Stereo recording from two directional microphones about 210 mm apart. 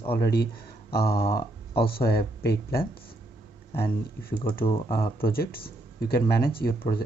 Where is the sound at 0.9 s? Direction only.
50° left (ahead or behind).